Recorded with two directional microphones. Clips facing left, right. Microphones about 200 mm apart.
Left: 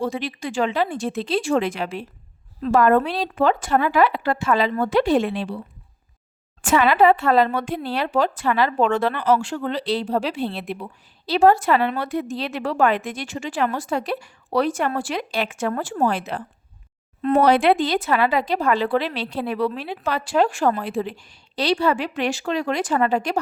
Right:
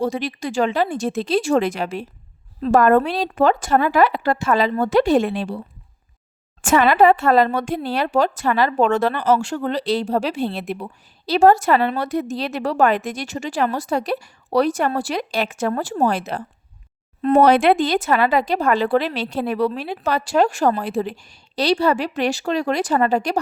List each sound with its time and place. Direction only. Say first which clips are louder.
0.0 s speech: right 3 dB; 40° right (ahead or behind)
6.6 s speech: right 2 dB; 45° right (ahead or behind)
17.4 s speech: right 2 dB; 50° right (ahead or behind)